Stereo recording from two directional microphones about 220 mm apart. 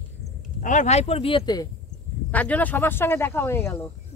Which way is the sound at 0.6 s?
35° left (ahead or behind).